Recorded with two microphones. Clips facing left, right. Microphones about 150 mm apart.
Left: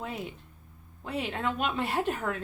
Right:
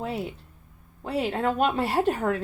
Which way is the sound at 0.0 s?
35° right (ahead or behind).